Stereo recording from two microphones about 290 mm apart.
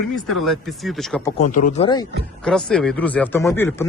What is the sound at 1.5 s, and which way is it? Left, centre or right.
Speech, left.